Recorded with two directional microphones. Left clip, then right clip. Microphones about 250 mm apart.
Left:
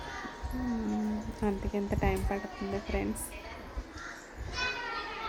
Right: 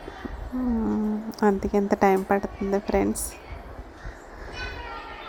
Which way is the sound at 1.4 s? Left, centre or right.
Centre.